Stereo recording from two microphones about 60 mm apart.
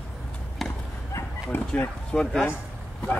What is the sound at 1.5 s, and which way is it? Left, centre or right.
Speech, left.